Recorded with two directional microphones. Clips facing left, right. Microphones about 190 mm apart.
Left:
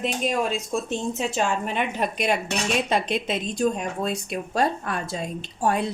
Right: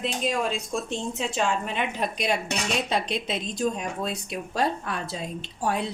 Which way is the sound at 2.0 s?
50° left (ahead or behind).